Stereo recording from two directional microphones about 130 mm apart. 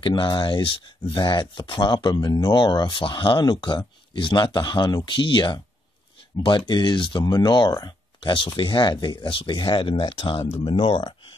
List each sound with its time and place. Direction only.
0.0 s speech: 40° left (ahead or behind)